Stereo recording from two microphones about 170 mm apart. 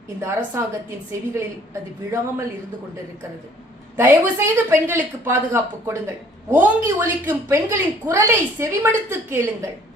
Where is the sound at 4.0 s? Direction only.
15° right (ahead or behind).